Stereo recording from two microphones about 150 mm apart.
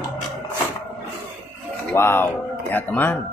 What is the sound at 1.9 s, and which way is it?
Speech, 15° left (ahead or behind).